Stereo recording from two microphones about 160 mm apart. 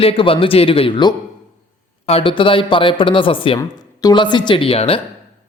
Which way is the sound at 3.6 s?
25° left (ahead or behind).